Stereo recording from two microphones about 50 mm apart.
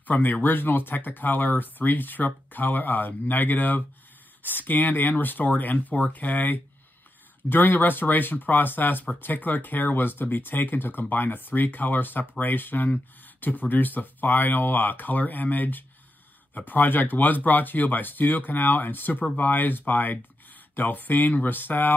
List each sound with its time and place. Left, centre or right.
0.0 s speech: left